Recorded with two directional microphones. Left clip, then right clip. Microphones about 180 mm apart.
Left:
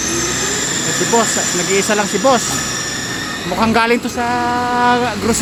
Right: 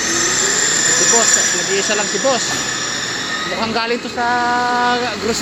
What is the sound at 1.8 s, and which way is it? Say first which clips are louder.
Speech: left 3 dB; 30° left (ahead or behind).